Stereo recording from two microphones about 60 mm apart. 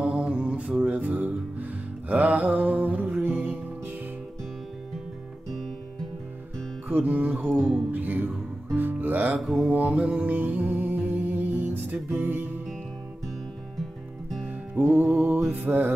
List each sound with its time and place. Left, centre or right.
0.0 s mantra: centre
0.9 s music: right
6.9 s music: right
9.4 s mantra: centre
9.7 s music: right
14.4 s music: right
15.0 s music: centre
15.5 s music: right